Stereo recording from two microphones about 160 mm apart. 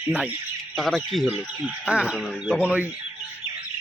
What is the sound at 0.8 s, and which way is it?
Speech, centre (ahead or behind).